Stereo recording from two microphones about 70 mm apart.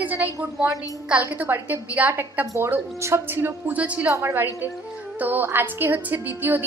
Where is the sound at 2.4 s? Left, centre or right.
Right; by 4.1 s centre.